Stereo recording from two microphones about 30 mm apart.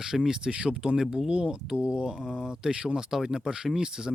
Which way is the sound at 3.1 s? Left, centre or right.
Centre.